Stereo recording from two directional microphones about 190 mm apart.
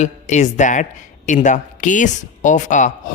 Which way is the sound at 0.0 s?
40° left (ahead or behind).